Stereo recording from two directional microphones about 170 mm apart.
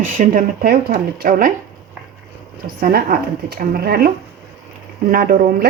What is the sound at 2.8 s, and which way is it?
Speech, 60° right (ahead or behind).